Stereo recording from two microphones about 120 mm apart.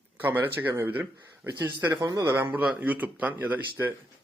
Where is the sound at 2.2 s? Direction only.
20° right (ahead or behind).